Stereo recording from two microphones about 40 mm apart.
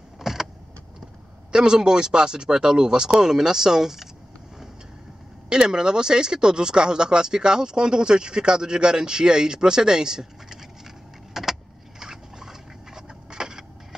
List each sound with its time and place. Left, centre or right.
0.2 s vehicle: centre
1.5 s speech: centre
5.5 s speech: centre
11.4 s vehicle: centre
12.0 s a sound: centre